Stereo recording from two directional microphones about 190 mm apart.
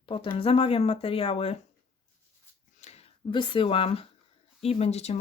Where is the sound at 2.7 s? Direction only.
35° left (ahead or behind).